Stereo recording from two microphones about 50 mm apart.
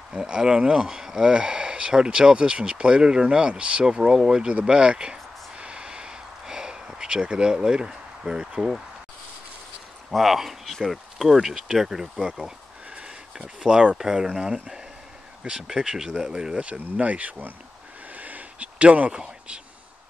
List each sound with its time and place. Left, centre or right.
0.2 s speech: centre
10.1 s speech: centre
12.3 s speech: centre; by 17.6 s right
18.1 s a sound: right